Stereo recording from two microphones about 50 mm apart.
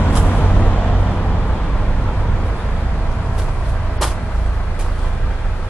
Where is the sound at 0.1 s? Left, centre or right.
Left.